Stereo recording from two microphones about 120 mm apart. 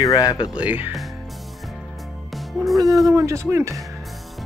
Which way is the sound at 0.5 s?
15° right (ahead or behind).